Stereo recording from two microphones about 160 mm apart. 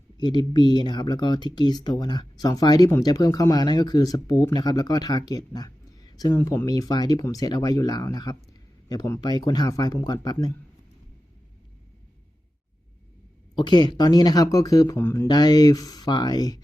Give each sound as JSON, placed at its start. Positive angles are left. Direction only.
{"t": 0.2, "sound": "speech", "side_deg": 25}
{"t": 13.6, "sound": "speech", "side_deg": 25}